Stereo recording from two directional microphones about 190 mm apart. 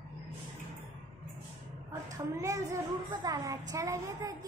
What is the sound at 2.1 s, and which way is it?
A woman's voice, 15° right (ahead or behind).